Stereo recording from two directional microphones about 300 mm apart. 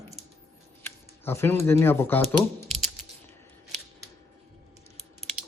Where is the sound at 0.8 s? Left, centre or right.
Centre.